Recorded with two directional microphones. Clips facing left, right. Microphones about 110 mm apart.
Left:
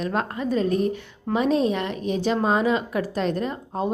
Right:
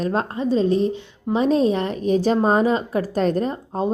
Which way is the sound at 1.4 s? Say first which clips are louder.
Right 4 dB; 35° right (ahead or behind).